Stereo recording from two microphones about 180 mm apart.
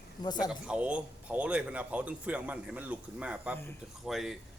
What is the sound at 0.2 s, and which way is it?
Speech, 25° left (ahead or behind).